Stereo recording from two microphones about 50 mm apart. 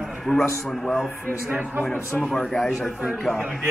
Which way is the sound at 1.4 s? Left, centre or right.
Right.